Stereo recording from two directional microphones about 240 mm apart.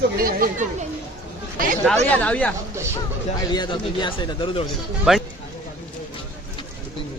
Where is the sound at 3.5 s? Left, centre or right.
Centre.